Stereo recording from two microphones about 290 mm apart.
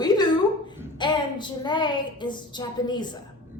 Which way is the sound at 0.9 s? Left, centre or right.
Centre.